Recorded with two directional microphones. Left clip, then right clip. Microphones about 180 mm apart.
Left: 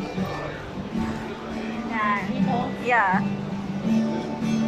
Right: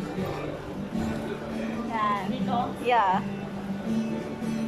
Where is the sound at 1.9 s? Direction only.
20° right (ahead or behind).